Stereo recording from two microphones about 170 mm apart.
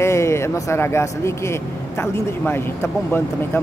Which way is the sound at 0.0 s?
15° left (ahead or behind).